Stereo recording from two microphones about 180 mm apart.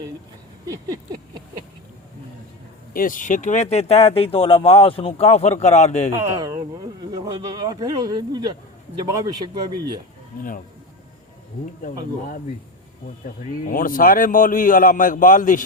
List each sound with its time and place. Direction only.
2.9 s speech: 50° left (ahead or behind)
6.4 s speech: 20° right (ahead or behind)
13.2 s a man's voice: 50° left (ahead or behind)